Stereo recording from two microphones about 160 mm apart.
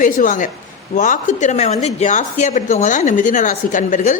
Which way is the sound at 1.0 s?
50° left (ahead or behind).